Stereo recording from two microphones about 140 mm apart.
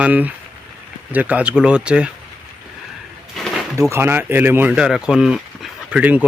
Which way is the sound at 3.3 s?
Centre (ahead or behind).